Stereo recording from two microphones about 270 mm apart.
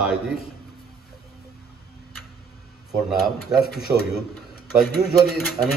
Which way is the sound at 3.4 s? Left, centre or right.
Left.